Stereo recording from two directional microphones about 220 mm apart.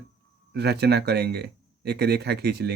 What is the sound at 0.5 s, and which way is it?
Speech, 50° right (ahead or behind).